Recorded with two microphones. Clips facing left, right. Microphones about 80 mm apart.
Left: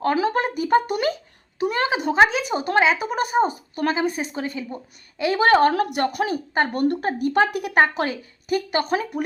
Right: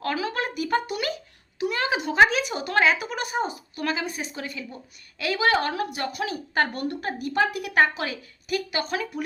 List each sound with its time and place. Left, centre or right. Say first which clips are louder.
0.0 s a woman's voice: left 7 dB; left
3.1 s a woman's voice: left 7 dB; left
5.4 s a woman's voice: left 7 dB; left
8.0 s a woman's voice: left 5 dB; left